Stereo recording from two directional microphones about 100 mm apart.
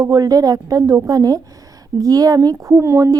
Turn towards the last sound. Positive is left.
turn(degrees=-30)  # may be behind; listen again after turning